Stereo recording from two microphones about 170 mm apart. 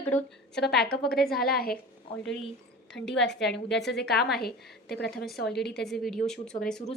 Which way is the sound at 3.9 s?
75° left (ahead or behind).